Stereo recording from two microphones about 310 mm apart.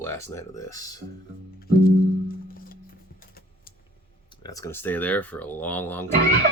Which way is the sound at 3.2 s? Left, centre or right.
Left.